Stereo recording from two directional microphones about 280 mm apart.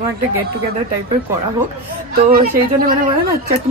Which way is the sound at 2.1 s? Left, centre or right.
Right.